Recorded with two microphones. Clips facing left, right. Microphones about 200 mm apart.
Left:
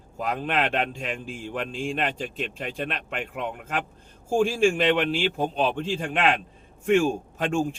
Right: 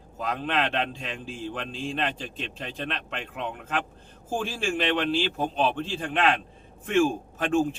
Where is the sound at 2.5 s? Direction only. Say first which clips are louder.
Left 3 dB; 15° left (ahead or behind).